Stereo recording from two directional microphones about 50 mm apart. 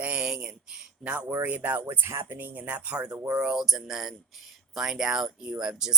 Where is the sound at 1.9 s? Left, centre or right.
Right; by 6.0 s centre.